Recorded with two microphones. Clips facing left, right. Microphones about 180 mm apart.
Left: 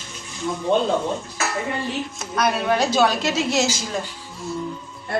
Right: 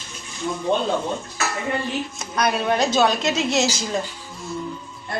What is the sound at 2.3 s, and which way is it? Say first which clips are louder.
A woman's voice: even; centre (ahead or behind).